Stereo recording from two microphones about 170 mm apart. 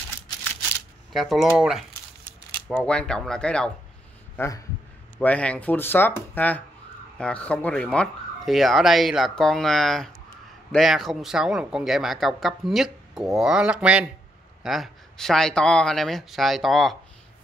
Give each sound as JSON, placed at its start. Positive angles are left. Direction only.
{"t": 1.1, "sound": "speech", "side_deg": 0}
{"t": 4.4, "sound": "speech", "side_deg": 20}
{"t": 5.2, "sound": "speech", "side_deg": 10}